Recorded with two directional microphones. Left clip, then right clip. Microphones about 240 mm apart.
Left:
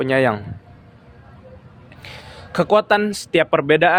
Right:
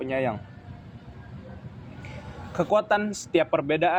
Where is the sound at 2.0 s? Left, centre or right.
Left.